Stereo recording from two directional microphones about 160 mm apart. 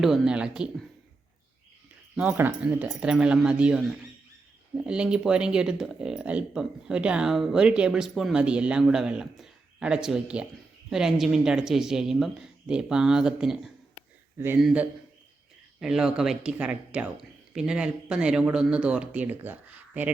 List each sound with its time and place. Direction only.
0.0 s speech: 5° right (ahead or behind)
2.1 s speech: 10° right (ahead or behind)
14.3 s speech: 15° right (ahead or behind)